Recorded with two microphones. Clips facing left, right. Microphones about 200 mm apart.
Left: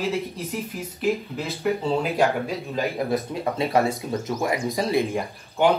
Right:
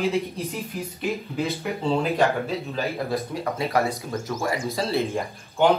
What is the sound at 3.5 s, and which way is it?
Speech, 25° left (ahead or behind).